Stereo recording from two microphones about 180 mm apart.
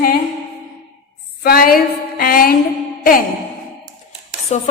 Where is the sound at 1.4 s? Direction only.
55° left (ahead or behind).